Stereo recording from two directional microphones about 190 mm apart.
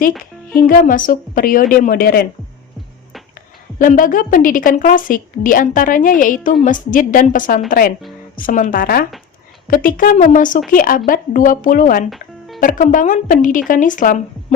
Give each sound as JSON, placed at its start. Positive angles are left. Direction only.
{"t": 0.5, "sound": "a woman's voice", "side_deg": 50}
{"t": 3.8, "sound": "a woman's voice", "side_deg": 45}